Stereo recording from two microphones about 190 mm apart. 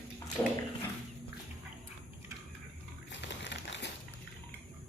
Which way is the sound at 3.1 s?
70° left (ahead or behind).